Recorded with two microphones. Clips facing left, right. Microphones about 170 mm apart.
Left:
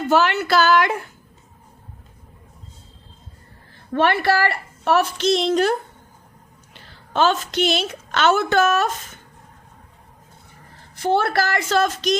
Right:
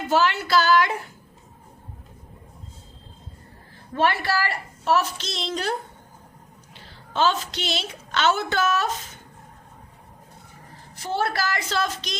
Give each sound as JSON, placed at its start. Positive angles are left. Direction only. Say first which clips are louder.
{"t": 0.1, "sound": "a woman's voice", "louder": "left 3 dB", "side_deg": 60}
{"t": 3.9, "sound": "a woman's voice", "louder": "left 5 dB", "side_deg": 60}
{"t": 7.1, "sound": "a woman's voice", "louder": "left 4 dB", "side_deg": 55}
{"t": 11.0, "sound": "a woman's voice", "louder": "left 6 dB", "side_deg": 60}